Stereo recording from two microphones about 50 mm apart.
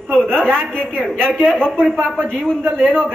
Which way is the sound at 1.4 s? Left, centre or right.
Centre.